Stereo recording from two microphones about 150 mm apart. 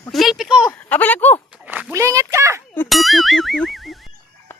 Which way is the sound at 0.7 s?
10° left (ahead or behind).